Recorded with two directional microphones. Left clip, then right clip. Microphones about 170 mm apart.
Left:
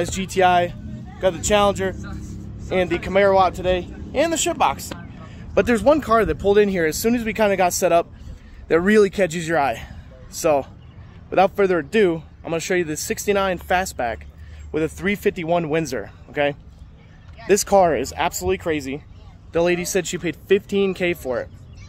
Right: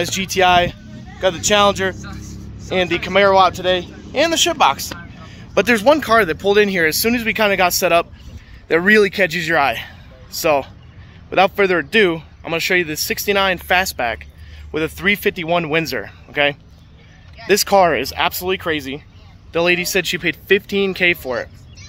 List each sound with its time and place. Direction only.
0.0 s speech: 5° right (ahead or behind)
5.2 s a man's voice: 5° left (ahead or behind)